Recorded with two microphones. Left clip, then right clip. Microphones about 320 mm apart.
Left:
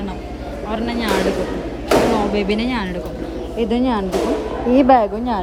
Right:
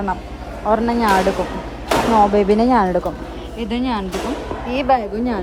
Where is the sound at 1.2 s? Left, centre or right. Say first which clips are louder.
Right 1 dB; centre.